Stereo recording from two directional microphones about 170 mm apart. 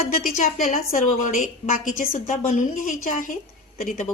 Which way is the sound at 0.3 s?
50° left (ahead or behind).